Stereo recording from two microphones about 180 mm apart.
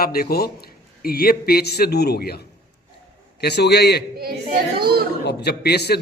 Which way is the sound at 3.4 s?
65° left (ahead or behind).